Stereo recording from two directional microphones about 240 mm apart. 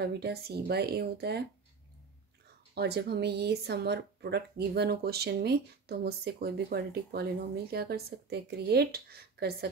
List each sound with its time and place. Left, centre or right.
0.0 s speech: right
2.7 s speech: right